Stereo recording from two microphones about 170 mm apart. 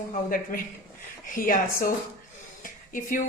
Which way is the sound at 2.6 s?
50° left (ahead or behind).